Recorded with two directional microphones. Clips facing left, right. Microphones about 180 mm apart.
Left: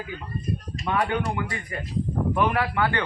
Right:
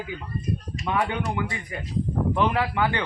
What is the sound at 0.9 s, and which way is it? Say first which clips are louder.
A man's voice: left 1 dB; 15° right (ahead or behind).